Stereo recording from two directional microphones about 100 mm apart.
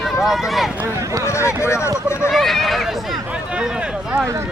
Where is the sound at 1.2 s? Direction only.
25° left (ahead or behind).